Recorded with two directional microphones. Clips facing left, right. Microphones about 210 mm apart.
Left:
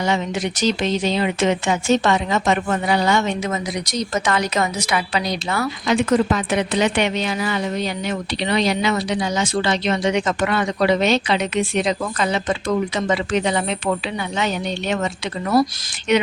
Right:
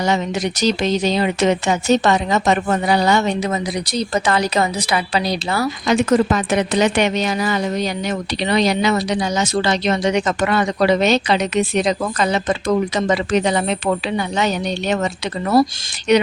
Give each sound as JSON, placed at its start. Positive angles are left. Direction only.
{"t": 0.0, "sound": "speech", "side_deg": -40}